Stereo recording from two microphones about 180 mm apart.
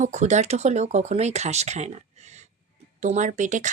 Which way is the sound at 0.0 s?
40° right (ahead or behind).